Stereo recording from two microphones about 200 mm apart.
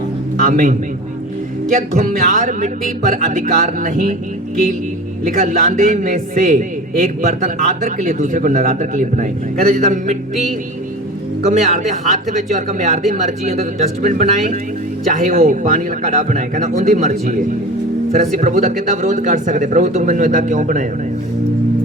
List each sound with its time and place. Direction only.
0.4 s a man's voice: 40° right (ahead or behind)
5.2 s a man's voice: 40° right (ahead or behind)
11.4 s a man's voice: 40° right (ahead or behind)